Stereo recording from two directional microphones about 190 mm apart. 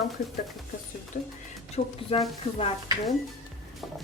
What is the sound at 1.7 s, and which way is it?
Speech, 30° left (ahead or behind).